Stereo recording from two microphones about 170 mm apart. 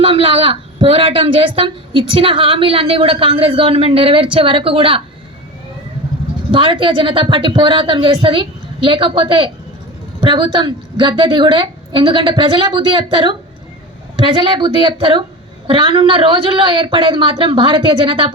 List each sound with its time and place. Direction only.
0.0 s a woman's voice: 35° right (ahead or behind)
6.5 s a woman's voice: 30° right (ahead or behind)